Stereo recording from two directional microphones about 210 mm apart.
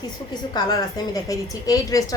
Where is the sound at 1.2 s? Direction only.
15° left (ahead or behind).